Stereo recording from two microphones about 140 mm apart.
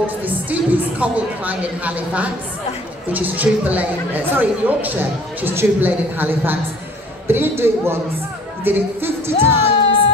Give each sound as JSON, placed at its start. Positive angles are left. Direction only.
{"t": 0.0, "sound": "a woman's voice", "side_deg": -10}
{"t": 8.6, "sound": "music", "side_deg": -15}